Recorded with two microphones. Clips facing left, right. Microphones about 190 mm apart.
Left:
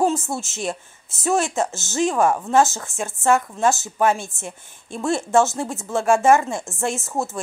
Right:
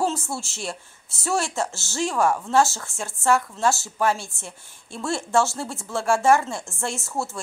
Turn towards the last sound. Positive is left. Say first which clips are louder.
# left 4 dB
turn(degrees=20)  # may be behind; listen again after turning